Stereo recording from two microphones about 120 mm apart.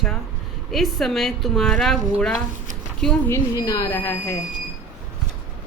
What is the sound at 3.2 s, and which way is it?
Speech, 25° left (ahead or behind).